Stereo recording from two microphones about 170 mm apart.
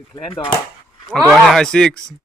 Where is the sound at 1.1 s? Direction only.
Centre (ahead or behind).